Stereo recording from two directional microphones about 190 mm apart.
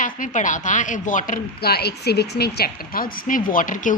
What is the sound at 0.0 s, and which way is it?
A woman's voice, 45° left (ahead or behind).